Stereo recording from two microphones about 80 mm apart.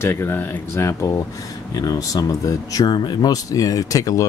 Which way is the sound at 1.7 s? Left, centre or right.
Left.